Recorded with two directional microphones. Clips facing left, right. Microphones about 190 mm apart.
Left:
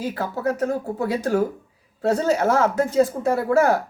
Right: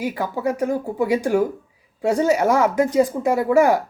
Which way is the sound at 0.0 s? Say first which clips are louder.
Right 1 dB; 15° right (ahead or behind).